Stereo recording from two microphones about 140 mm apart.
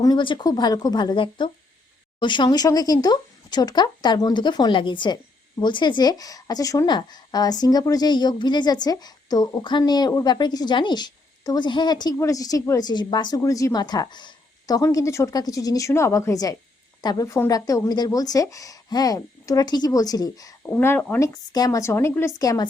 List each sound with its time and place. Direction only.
0.0 s speech: 30° left (ahead or behind)
20.7 s speech: 15° left (ahead or behind)